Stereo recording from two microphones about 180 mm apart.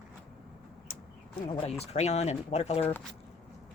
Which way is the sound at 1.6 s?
40° left (ahead or behind).